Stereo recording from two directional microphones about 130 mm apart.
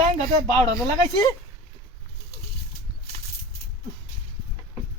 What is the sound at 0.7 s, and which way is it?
Speech, 25° left (ahead or behind).